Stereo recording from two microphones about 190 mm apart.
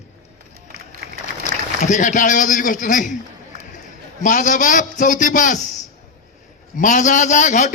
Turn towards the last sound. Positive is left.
turn(degrees=40)  # may be behind; listen again after turning